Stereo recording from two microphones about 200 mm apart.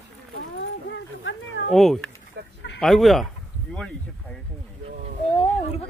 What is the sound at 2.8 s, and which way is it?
Speech, centre (ahead or behind).